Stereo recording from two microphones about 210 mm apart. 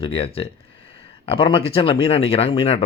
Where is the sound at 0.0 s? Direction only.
25° left (ahead or behind).